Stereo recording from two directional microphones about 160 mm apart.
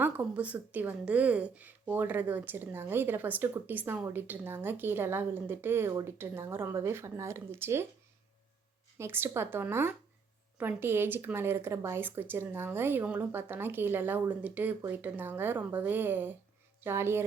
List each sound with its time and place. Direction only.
0.0 s a woman's voice: 10° right (ahead or behind)
9.0 s a woman's voice: 15° right (ahead or behind)